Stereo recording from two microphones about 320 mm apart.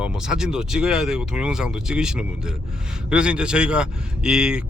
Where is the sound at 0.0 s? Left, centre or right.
Centre.